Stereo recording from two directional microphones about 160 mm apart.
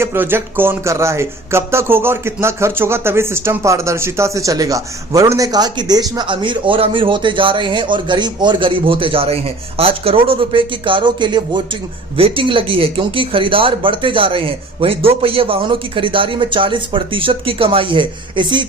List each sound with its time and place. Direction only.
0.0 s speech: 15° right (ahead or behind); by 18.6 s 30° right (ahead or behind)